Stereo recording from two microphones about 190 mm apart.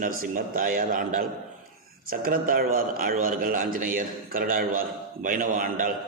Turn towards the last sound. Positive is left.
turn(degrees=-45)  # may be behind; listen again after turning